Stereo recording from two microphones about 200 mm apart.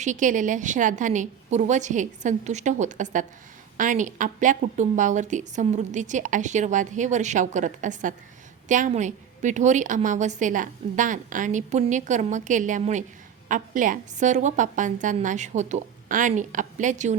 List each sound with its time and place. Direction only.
0.0 s a woman's voice: 40° right (ahead or behind)